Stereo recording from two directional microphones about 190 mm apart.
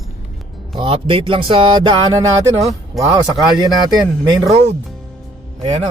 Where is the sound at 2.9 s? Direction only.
Centre (ahead or behind).